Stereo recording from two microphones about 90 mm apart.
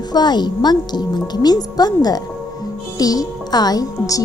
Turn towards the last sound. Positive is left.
turn(degrees=45)  # may be behind; listen again after turning